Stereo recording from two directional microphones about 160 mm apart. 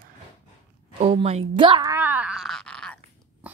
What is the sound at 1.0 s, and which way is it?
Speech, 40° right (ahead or behind).